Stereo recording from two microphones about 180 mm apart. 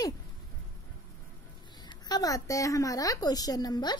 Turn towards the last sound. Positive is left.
turn(degrees=20)  # may be behind; listen again after turning